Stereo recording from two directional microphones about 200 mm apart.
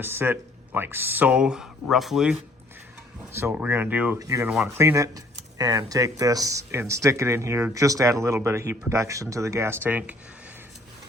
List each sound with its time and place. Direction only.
0.0 s speech: 10° right (ahead or behind)
3.3 s speech: 10° right (ahead or behind)